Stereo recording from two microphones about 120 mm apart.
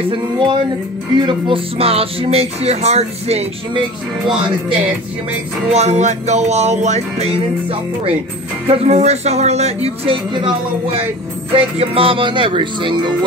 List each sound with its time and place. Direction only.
0.1 s speech: 45° right (ahead or behind); by 3.4 s 60° right (ahead or behind)
5.7 s music: 65° right (ahead or behind)
8.6 s speech: 70° right (ahead or behind); by 12.9 s 45° right (ahead or behind)